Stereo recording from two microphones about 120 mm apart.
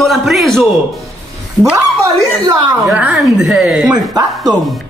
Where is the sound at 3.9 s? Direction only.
35° right (ahead or behind).